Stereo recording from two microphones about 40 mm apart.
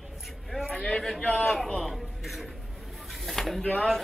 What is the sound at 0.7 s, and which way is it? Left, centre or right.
Speech, centre.